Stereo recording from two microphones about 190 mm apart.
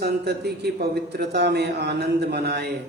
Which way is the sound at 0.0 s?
60° right (ahead or behind).